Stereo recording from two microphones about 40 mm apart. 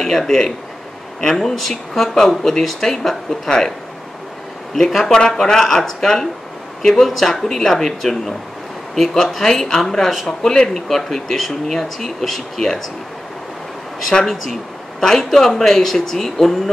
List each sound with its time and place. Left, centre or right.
0.0 s speech: centre
5.3 s speech: centre
14.2 s speech: centre